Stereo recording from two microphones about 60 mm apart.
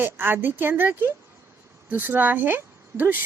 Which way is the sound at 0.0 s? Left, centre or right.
Right.